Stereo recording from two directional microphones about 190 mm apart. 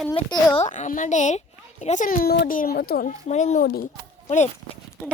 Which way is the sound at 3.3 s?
40° left (ahead or behind).